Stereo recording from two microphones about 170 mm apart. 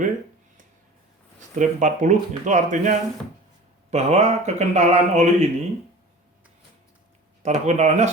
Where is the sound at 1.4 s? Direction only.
45° right (ahead or behind).